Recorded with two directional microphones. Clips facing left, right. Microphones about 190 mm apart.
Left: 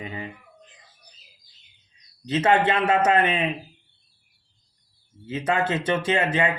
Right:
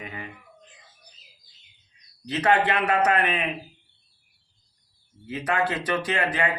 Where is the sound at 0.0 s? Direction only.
30° left (ahead or behind).